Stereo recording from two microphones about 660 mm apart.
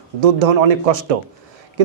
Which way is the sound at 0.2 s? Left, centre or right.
Right.